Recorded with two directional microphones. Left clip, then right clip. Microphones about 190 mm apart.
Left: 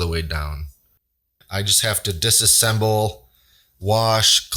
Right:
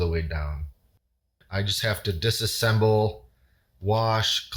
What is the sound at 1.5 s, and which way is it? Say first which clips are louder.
Speech: left 7 dB; 25° left (ahead or behind).